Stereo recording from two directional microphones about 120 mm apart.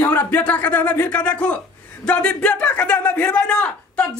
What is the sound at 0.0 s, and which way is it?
A man's voice, 15° left (ahead or behind).